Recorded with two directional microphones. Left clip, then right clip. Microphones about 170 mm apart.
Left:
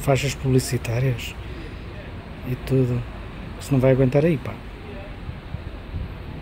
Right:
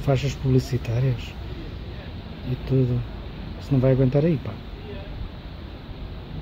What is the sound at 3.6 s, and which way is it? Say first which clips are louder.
Speech: left 3 dB; 10° left (ahead or behind).